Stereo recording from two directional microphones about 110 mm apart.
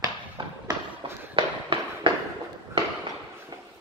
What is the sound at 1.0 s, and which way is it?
Fireworks, 55° right (ahead or behind).